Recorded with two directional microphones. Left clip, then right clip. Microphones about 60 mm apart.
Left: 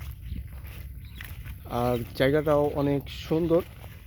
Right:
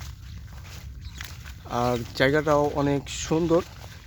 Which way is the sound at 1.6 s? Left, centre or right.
Centre.